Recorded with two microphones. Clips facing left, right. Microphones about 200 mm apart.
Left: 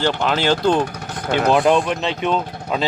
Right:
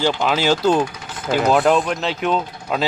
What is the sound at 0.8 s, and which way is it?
Vehicle, 60° left (ahead or behind).